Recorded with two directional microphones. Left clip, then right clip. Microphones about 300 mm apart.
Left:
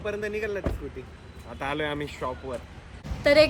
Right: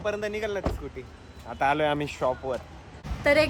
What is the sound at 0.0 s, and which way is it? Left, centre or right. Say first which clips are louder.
Speech: right 1 dB; centre.